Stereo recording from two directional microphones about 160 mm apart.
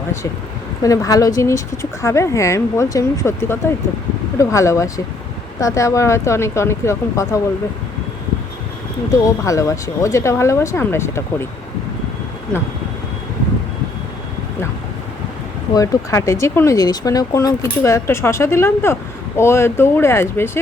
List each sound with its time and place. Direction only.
0.8 s speech: 20° left (ahead or behind)
9.1 s speech: 20° left (ahead or behind)
15.7 s speech: 20° left (ahead or behind)